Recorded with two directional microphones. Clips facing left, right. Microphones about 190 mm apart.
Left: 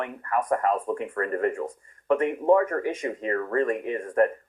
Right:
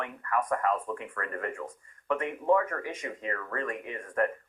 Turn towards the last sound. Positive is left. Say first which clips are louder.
# left 7 dB
turn(degrees=35)  # may be behind; listen again after turning